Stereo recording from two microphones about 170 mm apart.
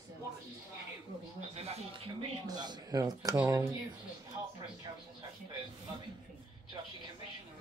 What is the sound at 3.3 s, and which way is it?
Speech, 10° right (ahead or behind).